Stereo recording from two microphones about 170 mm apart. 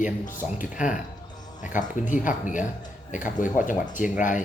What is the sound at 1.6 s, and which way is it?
Speech, 45° left (ahead or behind).